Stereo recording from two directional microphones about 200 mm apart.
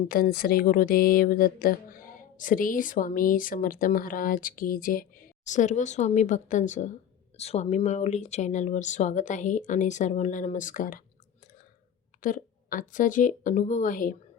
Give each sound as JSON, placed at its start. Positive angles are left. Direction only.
{"t": 0.1, "sound": "speech", "side_deg": 45}
{"t": 12.2, "sound": "speech", "side_deg": 40}